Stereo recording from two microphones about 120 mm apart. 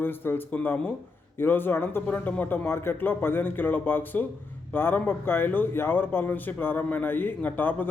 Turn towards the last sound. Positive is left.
turn(degrees=15)  # may be behind; listen again after turning